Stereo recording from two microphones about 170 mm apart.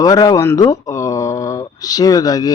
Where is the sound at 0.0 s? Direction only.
20° left (ahead or behind).